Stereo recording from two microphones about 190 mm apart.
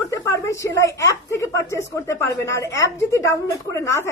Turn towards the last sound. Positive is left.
turn(degrees=15)  # may be behind; listen again after turning